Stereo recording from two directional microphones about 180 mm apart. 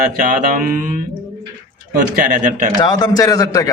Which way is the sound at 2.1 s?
50° right (ahead or behind).